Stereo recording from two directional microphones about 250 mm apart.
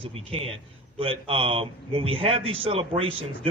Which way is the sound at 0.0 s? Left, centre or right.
Right.